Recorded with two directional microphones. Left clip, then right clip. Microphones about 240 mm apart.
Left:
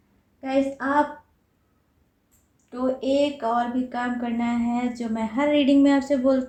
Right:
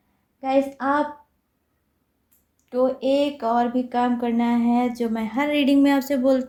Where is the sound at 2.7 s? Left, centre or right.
Right.